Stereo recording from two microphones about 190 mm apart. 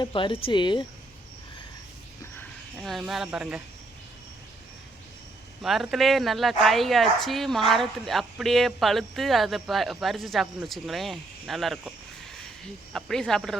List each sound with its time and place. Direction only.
0.0 s speech: 25° left (ahead or behind)
2.4 s speech: centre (ahead or behind)
5.6 s speech: centre (ahead or behind)